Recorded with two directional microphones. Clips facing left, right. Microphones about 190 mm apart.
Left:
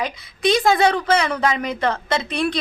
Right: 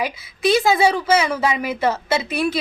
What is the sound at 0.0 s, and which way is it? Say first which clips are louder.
A woman's voice: right 1 dB; 5° right (ahead or behind).